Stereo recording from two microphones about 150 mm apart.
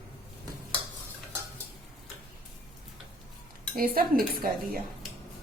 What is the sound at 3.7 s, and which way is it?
Dishes, 75° right (ahead or behind).